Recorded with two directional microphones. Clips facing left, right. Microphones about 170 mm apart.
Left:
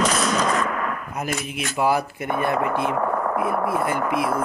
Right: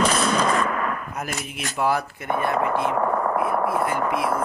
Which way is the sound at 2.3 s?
30° right (ahead or behind).